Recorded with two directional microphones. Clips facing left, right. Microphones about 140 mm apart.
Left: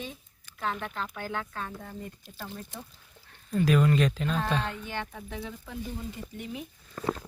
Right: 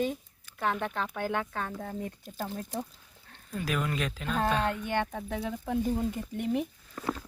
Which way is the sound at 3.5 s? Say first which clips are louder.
Left 8 dB; 5° right (ahead or behind).